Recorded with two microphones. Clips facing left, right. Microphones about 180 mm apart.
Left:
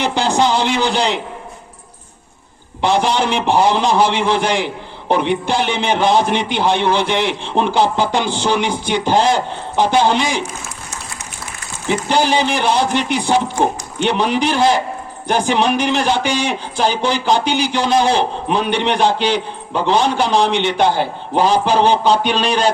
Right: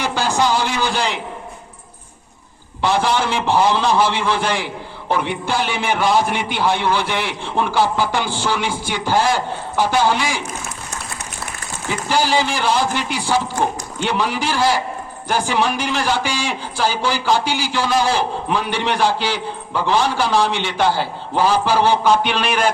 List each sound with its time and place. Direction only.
0.0 s a man's voice: 20° left (ahead or behind)
2.8 s a man's voice: 20° left (ahead or behind)
11.9 s a man's voice: 20° left (ahead or behind)